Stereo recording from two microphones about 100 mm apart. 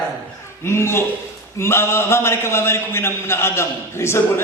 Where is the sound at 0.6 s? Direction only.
25° left (ahead or behind).